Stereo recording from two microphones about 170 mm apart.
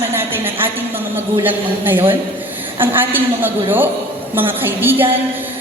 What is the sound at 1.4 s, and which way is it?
A woman's voice, 10° right (ahead or behind).